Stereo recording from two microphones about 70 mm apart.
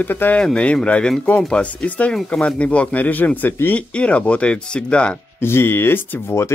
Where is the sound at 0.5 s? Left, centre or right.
Centre.